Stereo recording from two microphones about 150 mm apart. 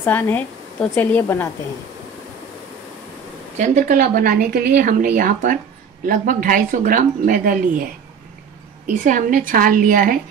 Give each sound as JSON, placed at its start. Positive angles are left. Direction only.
{"t": 0.0, "sound": "speech", "side_deg": 15}
{"t": 3.5, "sound": "speech", "side_deg": -55}
{"t": 8.8, "sound": "a woman's voice", "side_deg": -60}